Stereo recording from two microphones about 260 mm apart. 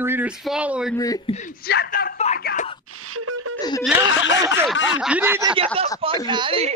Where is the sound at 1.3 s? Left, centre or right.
Left.